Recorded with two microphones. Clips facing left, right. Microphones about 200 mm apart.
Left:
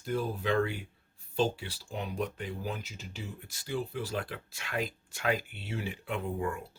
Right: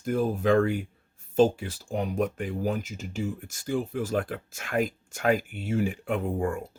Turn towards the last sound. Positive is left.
turn(degrees=-50)  # may be behind; listen again after turning